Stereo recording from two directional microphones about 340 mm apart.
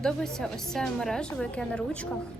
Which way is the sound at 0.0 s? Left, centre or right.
Centre.